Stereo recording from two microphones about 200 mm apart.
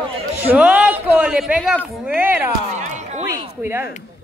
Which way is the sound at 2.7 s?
35° right (ahead or behind).